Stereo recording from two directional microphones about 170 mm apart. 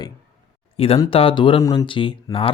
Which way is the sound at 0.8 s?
35° left (ahead or behind).